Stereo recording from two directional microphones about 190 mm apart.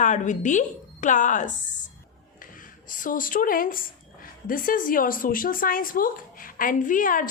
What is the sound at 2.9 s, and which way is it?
A woman's voice, 45° left (ahead or behind).